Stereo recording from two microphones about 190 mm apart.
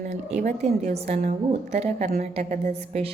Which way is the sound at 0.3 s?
40° right (ahead or behind).